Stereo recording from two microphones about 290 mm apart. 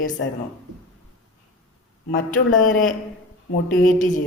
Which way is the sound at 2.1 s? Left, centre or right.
Left.